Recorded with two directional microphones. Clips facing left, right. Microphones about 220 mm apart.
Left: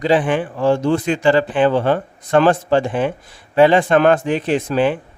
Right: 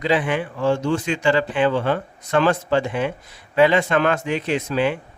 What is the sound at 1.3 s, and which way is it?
Speech, 35° left (ahead or behind).